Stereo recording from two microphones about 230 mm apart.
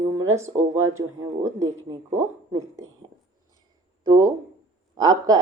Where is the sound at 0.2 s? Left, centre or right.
Centre.